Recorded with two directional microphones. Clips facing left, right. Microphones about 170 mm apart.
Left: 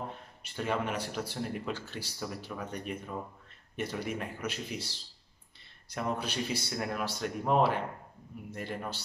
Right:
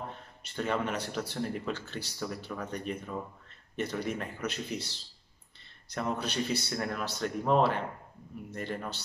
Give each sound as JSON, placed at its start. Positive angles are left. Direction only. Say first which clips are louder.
{"t": 0.4, "sound": "speech", "louder": "right 1 dB", "side_deg": 10}